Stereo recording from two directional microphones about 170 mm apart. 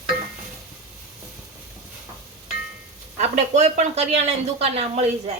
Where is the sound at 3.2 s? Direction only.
40° right (ahead or behind).